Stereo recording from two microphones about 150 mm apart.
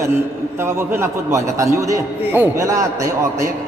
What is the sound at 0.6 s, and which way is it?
A man's voice, 15° right (ahead or behind).